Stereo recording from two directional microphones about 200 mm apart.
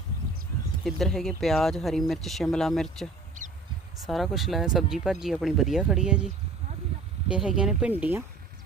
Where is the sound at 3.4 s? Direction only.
40° right (ahead or behind).